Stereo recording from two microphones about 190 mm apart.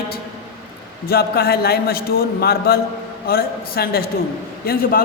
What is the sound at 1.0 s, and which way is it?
A man's voice, 55° left (ahead or behind).